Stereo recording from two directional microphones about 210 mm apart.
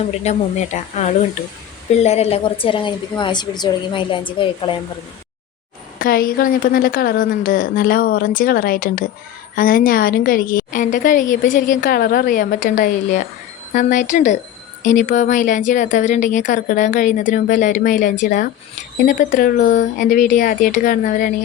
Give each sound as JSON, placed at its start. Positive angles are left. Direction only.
{"t": 0.2, "sound": "a woman's voice", "side_deg": 35}
{"t": 6.0, "sound": "a woman's voice", "side_deg": 45}